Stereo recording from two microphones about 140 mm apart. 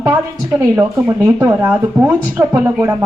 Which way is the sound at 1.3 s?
15° right (ahead or behind).